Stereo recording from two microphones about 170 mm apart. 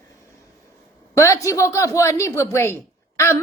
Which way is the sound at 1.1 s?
20° left (ahead or behind).